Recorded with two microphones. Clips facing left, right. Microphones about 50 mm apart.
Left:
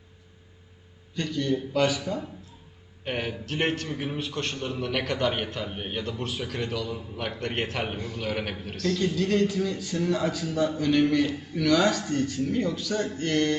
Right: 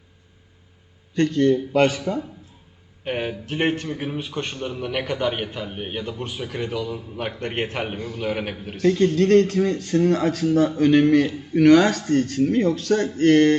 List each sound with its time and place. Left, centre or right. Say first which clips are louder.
1.1 s speech: right 9 dB; right
3.0 s a man's voice: right 4 dB; centre
7.2 s a man's voice: right 3 dB; centre
7.9 s a man's voice: right 3 dB; centre
8.2 s a man's voice: right 5 dB; centre
9.0 s speech: right 8 dB; right